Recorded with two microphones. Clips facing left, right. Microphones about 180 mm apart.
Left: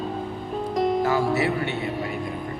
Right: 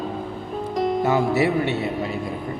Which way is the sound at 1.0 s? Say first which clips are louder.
Right 2 dB; 25° right (ahead or behind).